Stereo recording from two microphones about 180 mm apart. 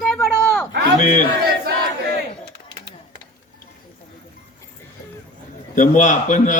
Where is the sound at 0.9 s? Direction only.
45° left (ahead or behind).